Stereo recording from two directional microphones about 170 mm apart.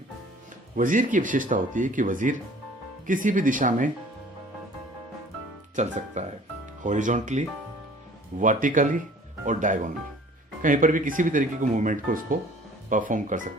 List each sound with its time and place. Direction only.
0.8 s speech: 50° right (ahead or behind)
5.7 s speech: 45° right (ahead or behind)